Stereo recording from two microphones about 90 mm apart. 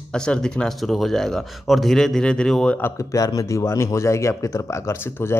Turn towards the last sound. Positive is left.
turn(degrees=30)  # may be behind; listen again after turning